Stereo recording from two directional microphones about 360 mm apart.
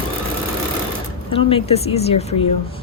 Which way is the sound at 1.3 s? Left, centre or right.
Centre.